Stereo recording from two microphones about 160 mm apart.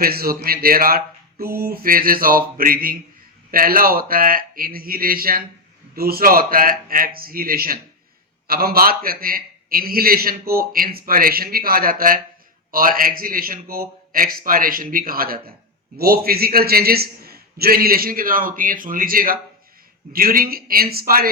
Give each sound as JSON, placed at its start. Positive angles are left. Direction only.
{"t": 0.0, "sound": "a man's voice", "side_deg": -70}